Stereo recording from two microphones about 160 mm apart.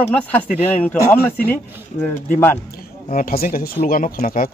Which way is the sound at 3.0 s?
60° left (ahead or behind).